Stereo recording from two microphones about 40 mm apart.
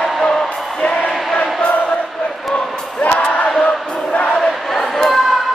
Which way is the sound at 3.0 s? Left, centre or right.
Left.